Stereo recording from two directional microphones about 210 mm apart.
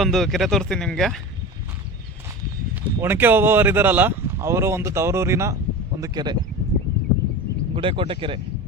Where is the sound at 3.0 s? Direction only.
10° right (ahead or behind).